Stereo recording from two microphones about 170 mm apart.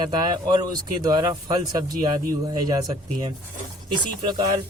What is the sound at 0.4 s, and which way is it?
Speech, 25° right (ahead or behind).